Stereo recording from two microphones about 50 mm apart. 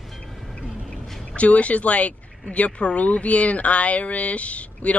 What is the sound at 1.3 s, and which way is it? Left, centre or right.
Speech, left.